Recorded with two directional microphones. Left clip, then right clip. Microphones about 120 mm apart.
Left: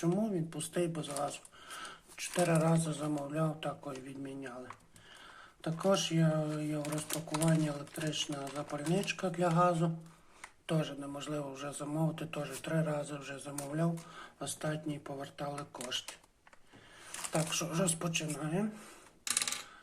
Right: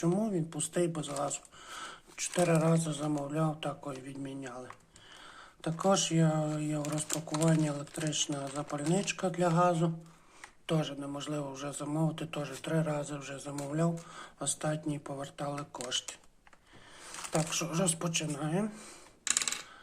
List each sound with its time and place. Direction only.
0.0 s speech: 30° right (ahead or behind)
5.6 s speech: 30° right (ahead or behind)
8.5 s speech: 25° right (ahead or behind)
9.0 s speech: 40° right (ahead or behind)
17.3 s speech: 25° right (ahead or behind)